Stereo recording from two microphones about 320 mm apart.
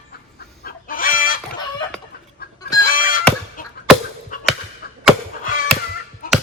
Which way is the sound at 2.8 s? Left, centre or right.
Left.